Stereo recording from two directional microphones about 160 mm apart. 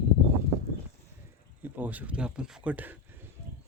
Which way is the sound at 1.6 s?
10° right (ahead or behind).